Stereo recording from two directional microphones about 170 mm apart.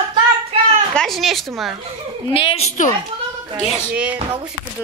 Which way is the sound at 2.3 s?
30° left (ahead or behind).